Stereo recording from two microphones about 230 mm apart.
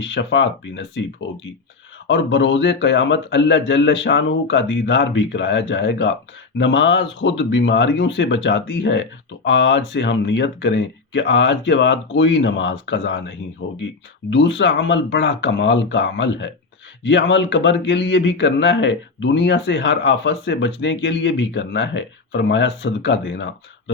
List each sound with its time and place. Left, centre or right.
0.0 s speech: left
2.0 s speech: left